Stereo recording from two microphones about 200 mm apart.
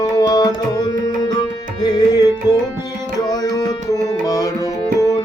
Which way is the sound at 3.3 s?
20° left (ahead or behind).